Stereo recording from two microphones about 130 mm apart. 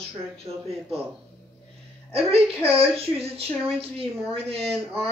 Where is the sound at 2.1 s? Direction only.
50° right (ahead or behind).